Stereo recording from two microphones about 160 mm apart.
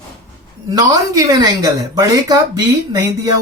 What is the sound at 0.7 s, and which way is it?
Speech, 25° right (ahead or behind).